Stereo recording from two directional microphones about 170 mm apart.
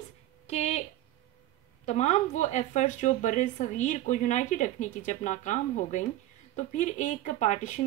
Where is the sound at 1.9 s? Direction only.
45° left (ahead or behind).